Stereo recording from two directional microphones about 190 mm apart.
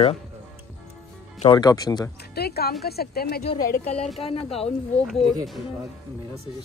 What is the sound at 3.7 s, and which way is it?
Speech, 35° left (ahead or behind).